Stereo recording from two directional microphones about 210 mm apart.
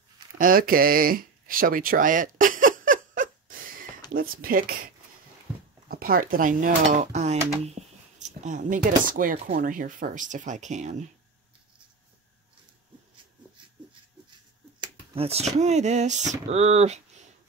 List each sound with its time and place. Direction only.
0.4 s a sound: 45° right (ahead or behind)
4.1 s speech: 45° right (ahead or behind)
14.8 s speech: 30° right (ahead or behind)